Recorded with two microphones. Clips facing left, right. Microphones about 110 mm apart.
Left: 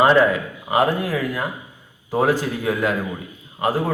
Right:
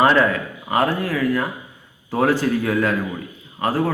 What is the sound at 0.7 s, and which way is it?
A man's voice, 20° left (ahead or behind).